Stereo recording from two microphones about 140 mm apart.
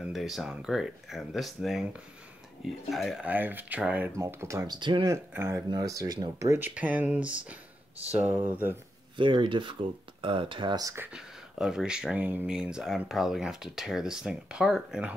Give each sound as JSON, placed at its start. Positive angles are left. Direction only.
{"t": 0.0, "sound": "speech", "side_deg": 0}
{"t": 3.3, "sound": "speech", "side_deg": -15}
{"t": 4.7, "sound": "speech", "side_deg": -35}
{"t": 5.3, "sound": "speech", "side_deg": -15}
{"t": 5.7, "sound": "speech", "side_deg": -25}
{"t": 9.1, "sound": "speech", "side_deg": -35}
{"t": 11.1, "sound": "speech", "side_deg": -5}